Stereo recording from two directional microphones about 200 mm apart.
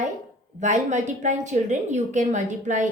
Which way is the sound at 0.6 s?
40° right (ahead or behind).